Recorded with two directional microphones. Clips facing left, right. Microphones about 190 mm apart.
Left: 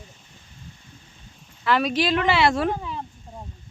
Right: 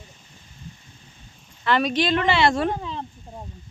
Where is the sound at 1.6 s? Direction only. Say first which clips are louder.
Even; 5° left (ahead or behind).